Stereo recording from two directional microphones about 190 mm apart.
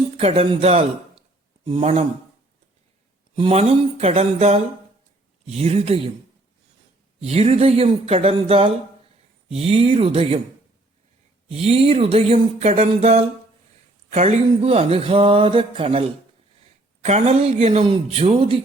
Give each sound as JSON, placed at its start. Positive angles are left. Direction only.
{"t": 0.2, "sound": "speech", "side_deg": -30}
{"t": 3.3, "sound": "speech", "side_deg": -30}
{"t": 7.2, "sound": "speech", "side_deg": -35}
{"t": 11.4, "sound": "speech", "side_deg": -30}